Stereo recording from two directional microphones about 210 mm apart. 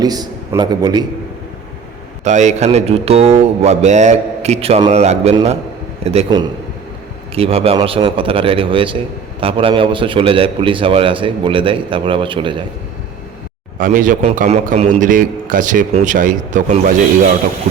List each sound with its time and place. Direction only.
0.0 s a man's voice: 20° right (ahead or behind)
2.2 s a man's voice: 35° right (ahead or behind)
13.7 s a man's voice: 40° right (ahead or behind)